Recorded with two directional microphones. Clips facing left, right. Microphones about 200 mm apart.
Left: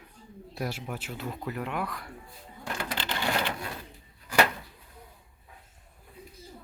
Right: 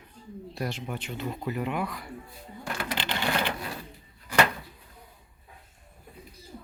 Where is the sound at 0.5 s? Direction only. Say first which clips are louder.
Right 1 dB; 5° left (ahead or behind).